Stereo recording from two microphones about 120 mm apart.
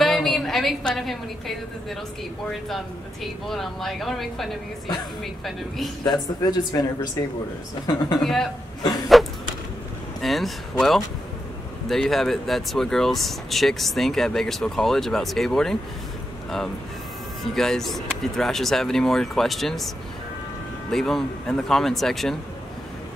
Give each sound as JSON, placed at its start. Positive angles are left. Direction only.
{"t": 0.0, "sound": "a sound", "side_deg": 0}
{"t": 3.4, "sound": "speech", "side_deg": 0}
{"t": 6.0, "sound": "speech", "side_deg": 35}
{"t": 8.2, "sound": "speech", "side_deg": 0}
{"t": 9.1, "sound": "a sound", "side_deg": 0}
{"t": 10.2, "sound": "speech", "side_deg": 0}
{"t": 17.6, "sound": "speech", "side_deg": 5}
{"t": 20.9, "sound": "speech", "side_deg": 5}